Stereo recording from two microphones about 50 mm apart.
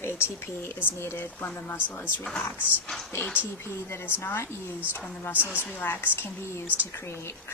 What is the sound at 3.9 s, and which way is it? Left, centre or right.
Speech, left.